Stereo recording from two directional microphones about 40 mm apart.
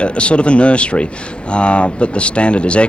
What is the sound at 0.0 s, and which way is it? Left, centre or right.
Speech, left.